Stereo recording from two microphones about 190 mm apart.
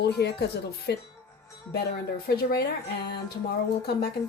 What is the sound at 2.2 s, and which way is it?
Speech, 55° left (ahead or behind).